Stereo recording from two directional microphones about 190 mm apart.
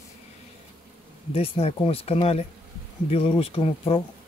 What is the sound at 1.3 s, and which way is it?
Speech, 30° left (ahead or behind).